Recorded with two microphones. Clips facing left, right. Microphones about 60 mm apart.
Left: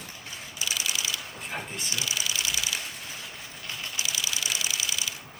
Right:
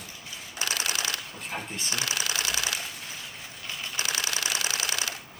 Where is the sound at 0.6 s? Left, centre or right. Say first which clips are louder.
Right 2 dB; right.